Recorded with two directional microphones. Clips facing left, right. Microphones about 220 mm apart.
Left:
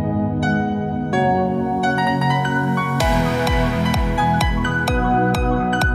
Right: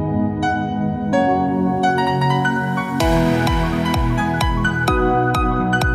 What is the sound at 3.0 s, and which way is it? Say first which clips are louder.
Music: right 6 dB; centre (ahead or behind).